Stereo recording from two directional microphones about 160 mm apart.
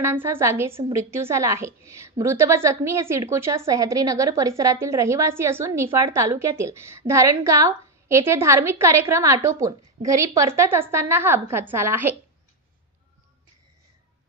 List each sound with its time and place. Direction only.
0.0 s a woman's voice: 15° right (ahead or behind)